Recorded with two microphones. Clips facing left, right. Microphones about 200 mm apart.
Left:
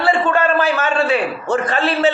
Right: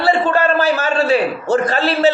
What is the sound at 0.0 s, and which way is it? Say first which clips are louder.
A man's voice: right 1 dB; 40° right (ahead or behind).